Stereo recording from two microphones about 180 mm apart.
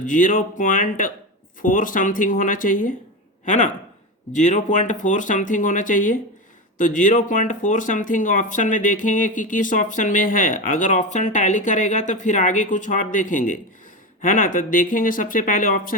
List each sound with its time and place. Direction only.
0.0 s speech: 45° left (ahead or behind)